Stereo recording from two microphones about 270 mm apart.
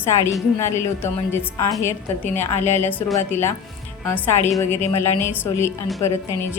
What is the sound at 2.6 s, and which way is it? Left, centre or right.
A woman's voice, centre.